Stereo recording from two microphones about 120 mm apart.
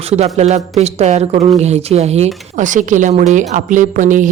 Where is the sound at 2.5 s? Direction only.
90° right.